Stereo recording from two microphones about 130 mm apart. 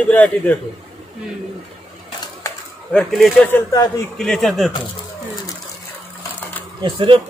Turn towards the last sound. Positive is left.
turn(degrees=-40)  # may be behind; listen again after turning